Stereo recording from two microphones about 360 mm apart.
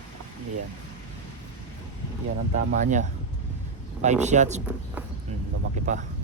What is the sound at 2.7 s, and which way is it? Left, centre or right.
Speech, right.